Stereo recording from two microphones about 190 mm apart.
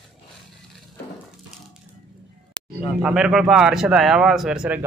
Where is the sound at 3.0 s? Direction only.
Centre (ahead or behind).